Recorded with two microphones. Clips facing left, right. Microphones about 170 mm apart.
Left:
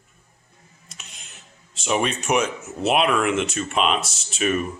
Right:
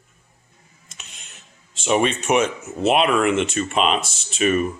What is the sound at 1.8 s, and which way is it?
Speech, centre (ahead or behind).